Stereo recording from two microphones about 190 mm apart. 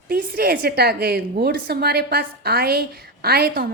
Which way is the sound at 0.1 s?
55° right (ahead or behind).